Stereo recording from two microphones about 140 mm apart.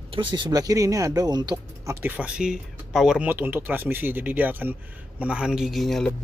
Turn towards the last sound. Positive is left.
turn(degrees=5)  # may be behind; listen again after turning